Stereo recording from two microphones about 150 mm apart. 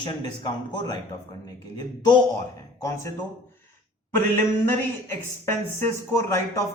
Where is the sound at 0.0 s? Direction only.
30° left (ahead or behind).